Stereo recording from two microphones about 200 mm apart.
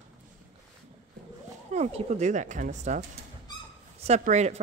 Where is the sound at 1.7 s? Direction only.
30° right (ahead or behind).